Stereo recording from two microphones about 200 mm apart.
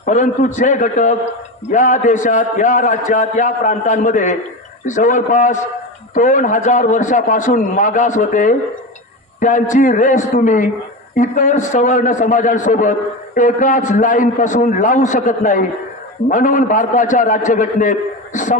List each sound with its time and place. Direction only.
0.0 s a man's voice: 40° left (ahead or behind)